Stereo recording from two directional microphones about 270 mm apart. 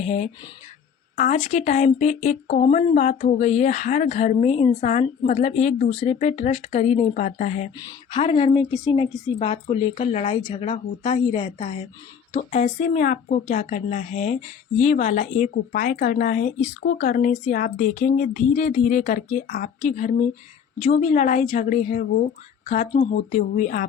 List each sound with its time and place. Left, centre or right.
0.0 s speech: left